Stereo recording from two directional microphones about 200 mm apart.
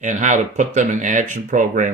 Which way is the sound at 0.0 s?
40° right (ahead or behind).